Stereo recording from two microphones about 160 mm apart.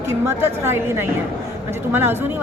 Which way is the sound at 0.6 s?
15° right (ahead or behind).